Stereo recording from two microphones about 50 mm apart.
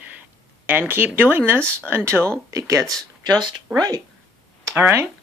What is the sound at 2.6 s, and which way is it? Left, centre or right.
Speech, right.